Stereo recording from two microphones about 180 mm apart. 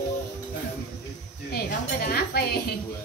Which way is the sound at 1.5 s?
60° left (ahead or behind).